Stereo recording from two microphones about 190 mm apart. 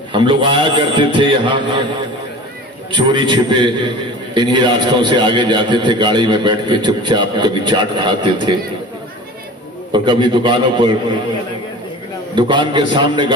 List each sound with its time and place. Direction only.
0.1 s a man's voice: 25° right (ahead or behind)
2.9 s a man's voice: 25° right (ahead or behind)
9.9 s a man's voice: 25° right (ahead or behind)
12.3 s a man's voice: 25° right (ahead or behind)